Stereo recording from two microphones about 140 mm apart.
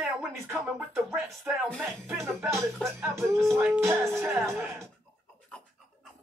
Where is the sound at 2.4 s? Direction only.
Centre (ahead or behind).